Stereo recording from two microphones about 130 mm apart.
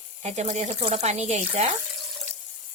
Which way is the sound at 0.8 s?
60° right (ahead or behind).